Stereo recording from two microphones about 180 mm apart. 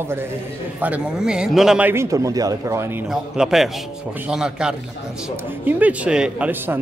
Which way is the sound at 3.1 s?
Centre (ahead or behind).